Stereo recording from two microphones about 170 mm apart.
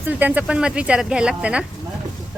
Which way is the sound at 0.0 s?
10° right (ahead or behind).